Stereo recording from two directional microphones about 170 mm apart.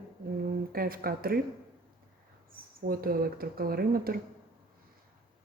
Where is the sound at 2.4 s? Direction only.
60° right (ahead or behind).